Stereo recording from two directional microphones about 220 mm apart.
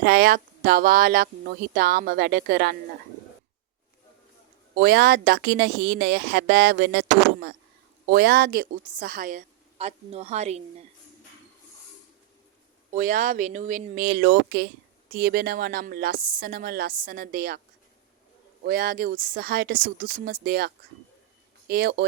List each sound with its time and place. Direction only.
0.0 s speech: 45° right (ahead or behind)
4.7 s speech: 45° right (ahead or behind)
8.0 s a woman's voice: 45° right (ahead or behind); by 10.6 s 30° right (ahead or behind)
12.9 s a woman's voice: 35° right (ahead or behind)
18.6 s speech: 45° right (ahead or behind)